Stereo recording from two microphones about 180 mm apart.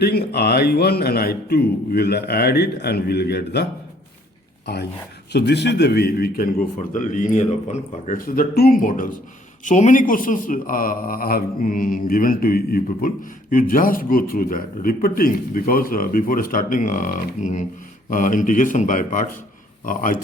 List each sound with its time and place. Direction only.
0.0 s a man's voice: 65° left (ahead or behind)